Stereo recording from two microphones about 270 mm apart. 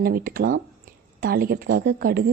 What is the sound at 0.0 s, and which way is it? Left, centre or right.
Speech, right.